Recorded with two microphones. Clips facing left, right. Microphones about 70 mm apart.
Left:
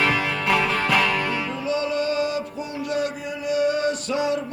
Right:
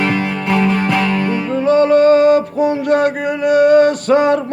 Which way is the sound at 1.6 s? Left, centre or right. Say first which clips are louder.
Right 15 dB; right.